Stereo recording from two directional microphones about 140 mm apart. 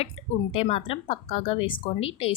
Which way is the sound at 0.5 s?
45° left (ahead or behind).